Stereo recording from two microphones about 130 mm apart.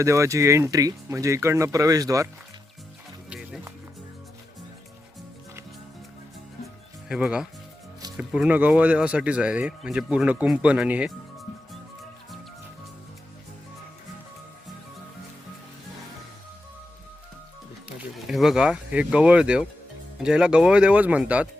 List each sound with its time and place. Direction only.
0.0 s speech: 20° right (ahead or behind)
3.2 s music: 5° right (ahead or behind)
7.1 s speech: 5° right (ahead or behind)
17.8 s speech: 5° right (ahead or behind)